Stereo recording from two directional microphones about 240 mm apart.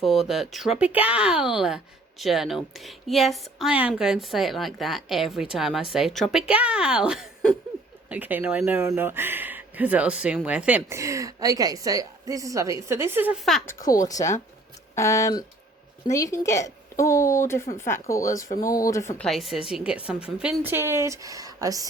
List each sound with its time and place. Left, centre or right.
0.0 s speech: centre
14.9 s a woman's voice: centre
19.3 s speech: centre